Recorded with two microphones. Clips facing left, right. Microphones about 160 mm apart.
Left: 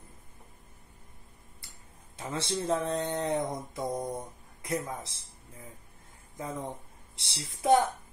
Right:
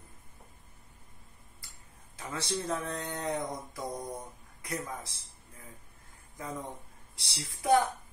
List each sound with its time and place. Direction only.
2.1 s speech: 25° left (ahead or behind)
6.3 s speech: 20° left (ahead or behind)